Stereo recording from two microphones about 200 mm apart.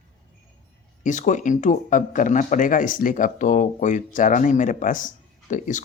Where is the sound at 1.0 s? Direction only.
40° left (ahead or behind).